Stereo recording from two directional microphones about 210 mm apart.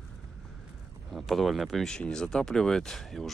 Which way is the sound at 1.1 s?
Centre (ahead or behind).